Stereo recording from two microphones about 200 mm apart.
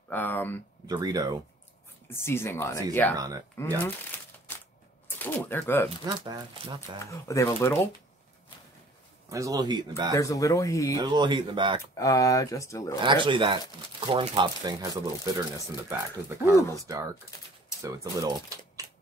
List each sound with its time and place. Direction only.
0.1 s speech: 10° left (ahead or behind)
0.8 s speech: 20° right (ahead or behind)
2.0 s speech: 10° left (ahead or behind)
3.2 s speech: 15° right (ahead or behind)
3.5 s speech: 10° left (ahead or behind)
4.5 s typewriter: 10° left (ahead or behind)
5.2 s speech: 10° left (ahead or behind)
6.0 s speech: 25° right (ahead or behind)
7.1 s speech: 15° left (ahead or behind)
9.3 s speech: 15° right (ahead or behind)
10.1 s speech: 15° left (ahead or behind)
11.0 s speech: 20° right (ahead or behind)
12.0 s speech: 15° left (ahead or behind)
13.0 s speech: 25° right (ahead or behind)